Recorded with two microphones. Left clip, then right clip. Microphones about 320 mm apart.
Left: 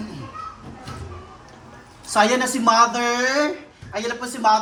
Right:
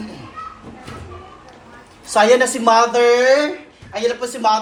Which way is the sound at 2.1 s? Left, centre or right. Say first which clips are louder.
Right 5 dB; left.